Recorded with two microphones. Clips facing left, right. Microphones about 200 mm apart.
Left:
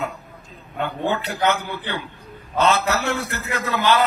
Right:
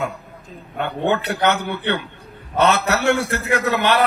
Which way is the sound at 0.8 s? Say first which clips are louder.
Right 3 dB; 70° right (ahead or behind).